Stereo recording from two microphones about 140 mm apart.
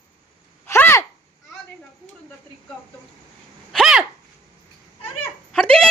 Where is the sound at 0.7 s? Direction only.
20° left (ahead or behind).